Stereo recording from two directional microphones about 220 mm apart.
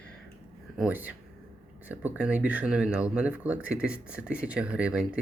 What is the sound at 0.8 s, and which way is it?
Speech, 5° right (ahead or behind).